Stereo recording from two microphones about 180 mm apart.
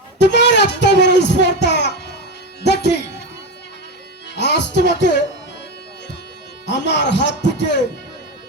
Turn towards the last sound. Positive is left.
turn(degrees=75)  # may be behind; listen again after turning